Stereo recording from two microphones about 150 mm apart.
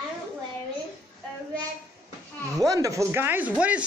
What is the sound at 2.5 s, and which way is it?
Speech, 20° right (ahead or behind).